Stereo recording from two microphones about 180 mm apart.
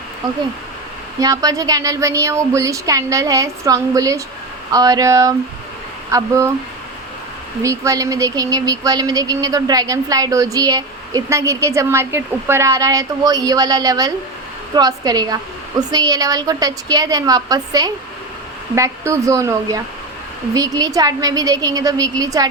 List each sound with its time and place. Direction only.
1.2 s speech: 20° right (ahead or behind)
7.6 s speech: 15° right (ahead or behind)